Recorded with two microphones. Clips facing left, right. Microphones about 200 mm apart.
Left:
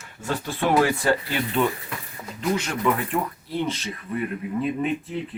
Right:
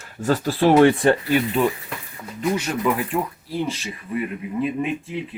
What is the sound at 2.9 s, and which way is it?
Speech, 5° right (ahead or behind).